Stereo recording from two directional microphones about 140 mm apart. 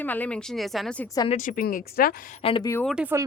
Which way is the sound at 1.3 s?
75° left (ahead or behind).